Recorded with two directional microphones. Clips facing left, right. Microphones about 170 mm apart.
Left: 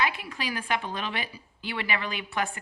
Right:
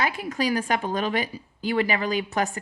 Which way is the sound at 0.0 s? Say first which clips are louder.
Right 5 dB; 45° right (ahead or behind).